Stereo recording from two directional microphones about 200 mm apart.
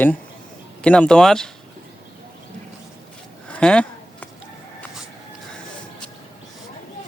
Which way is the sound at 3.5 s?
5° left (ahead or behind).